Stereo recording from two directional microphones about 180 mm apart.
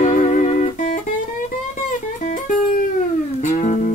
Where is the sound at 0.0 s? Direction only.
45° left (ahead or behind).